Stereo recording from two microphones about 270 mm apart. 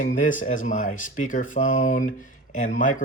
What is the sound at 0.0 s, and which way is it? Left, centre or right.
Speech, left.